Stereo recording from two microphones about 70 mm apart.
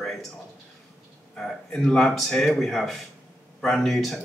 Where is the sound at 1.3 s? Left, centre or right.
Centre.